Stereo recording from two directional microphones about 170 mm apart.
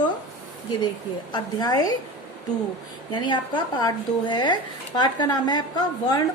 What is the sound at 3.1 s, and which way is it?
Speech, 30° left (ahead or behind).